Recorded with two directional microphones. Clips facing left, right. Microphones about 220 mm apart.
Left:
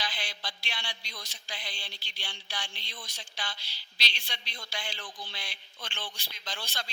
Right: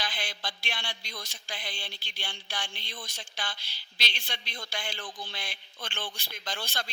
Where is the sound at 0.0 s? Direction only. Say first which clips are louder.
Right 2 dB; 50° right (ahead or behind).